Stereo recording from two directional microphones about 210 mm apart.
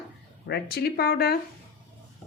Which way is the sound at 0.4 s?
50° left (ahead or behind).